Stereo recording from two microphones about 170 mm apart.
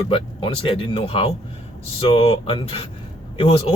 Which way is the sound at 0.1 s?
30° left (ahead or behind).